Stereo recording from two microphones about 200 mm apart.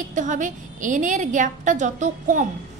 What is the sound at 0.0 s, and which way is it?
A woman's voice, 40° right (ahead or behind).